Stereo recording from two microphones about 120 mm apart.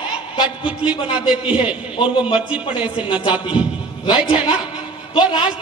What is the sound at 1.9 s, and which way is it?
Speech, 40° left (ahead or behind).